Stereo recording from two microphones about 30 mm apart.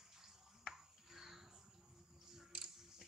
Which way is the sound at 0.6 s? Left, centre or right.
Centre.